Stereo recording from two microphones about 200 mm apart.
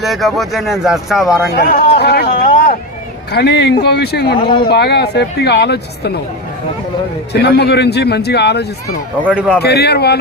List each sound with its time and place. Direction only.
0.0 s speech: centre (ahead or behind)
1.5 s a sound: 50° left (ahead or behind)
3.3 s speech: 55° left (ahead or behind)
7.4 s speech: 55° left (ahead or behind)
9.2 s speech: 5° right (ahead or behind)
9.6 s speech: 55° left (ahead or behind)